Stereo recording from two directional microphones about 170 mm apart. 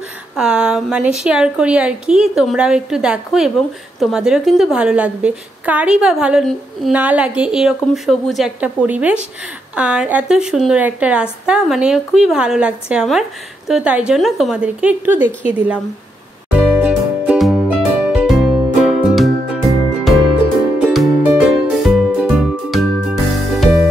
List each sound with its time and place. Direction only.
0.4 s a woman's voice: 5° right (ahead or behind)
16.5 s music: 5° right (ahead or behind)
20.8 s music: centre (ahead or behind)